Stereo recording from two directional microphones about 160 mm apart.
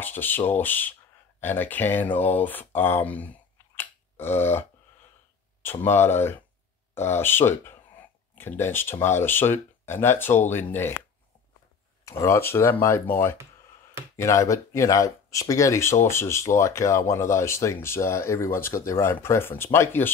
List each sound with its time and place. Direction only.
0.0 s speech: 10° left (ahead or behind)
12.0 s speech: 20° left (ahead or behind)